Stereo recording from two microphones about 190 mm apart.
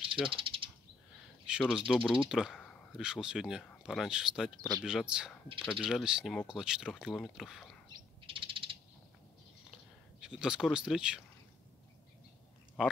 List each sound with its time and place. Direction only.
0.0 s bird: 25° right (ahead or behind)
1.4 s a sound: 5° right (ahead or behind)
1.9 s speech: 5° right (ahead or behind)
7.9 s bird: 25° right (ahead or behind)
10.2 s speech: 5° right (ahead or behind)
12.8 s speech: 5° right (ahead or behind)